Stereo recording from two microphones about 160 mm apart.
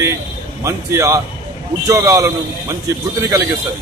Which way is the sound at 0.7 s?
20° right (ahead or behind).